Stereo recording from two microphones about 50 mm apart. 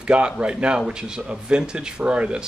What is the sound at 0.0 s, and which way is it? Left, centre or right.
Speech, right.